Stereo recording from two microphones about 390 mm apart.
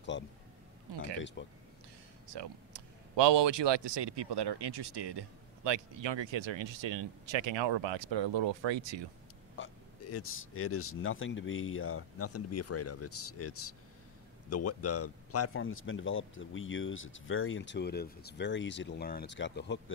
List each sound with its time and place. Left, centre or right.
0.1 s a sound: left
1.4 s speech: left
2.3 s speech: right
9.6 s speech: left